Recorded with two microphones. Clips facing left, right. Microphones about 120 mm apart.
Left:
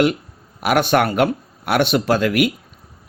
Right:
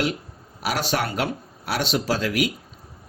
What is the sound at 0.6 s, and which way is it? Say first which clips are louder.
Speech: left 8 dB; 55° left (ahead or behind).